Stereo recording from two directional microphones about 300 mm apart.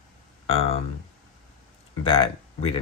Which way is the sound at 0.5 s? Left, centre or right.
Centre.